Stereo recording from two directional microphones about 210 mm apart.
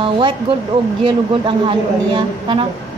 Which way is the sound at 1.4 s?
25° right (ahead or behind).